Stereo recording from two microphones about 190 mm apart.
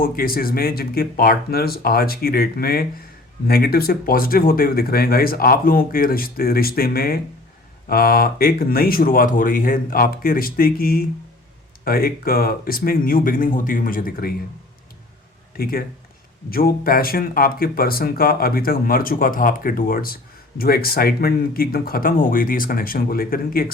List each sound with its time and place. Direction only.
0.0 s speech: 50° left (ahead or behind)
15.5 s speech: 50° left (ahead or behind)